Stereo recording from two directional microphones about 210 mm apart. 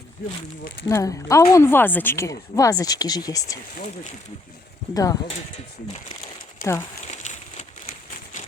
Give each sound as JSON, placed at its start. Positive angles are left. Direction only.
{"t": 0.9, "sound": "speech", "side_deg": 15}
{"t": 4.9, "sound": "speech", "side_deg": 15}
{"t": 7.1, "sound": "a sound", "side_deg": 35}